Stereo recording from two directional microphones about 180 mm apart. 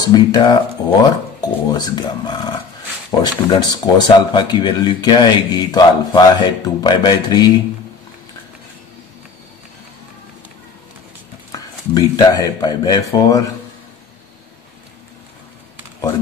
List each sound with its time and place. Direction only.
0.0 s speech: 25° left (ahead or behind)
11.5 s speech: 20° left (ahead or behind)